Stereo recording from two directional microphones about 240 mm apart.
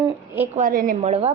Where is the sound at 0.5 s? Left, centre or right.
Right.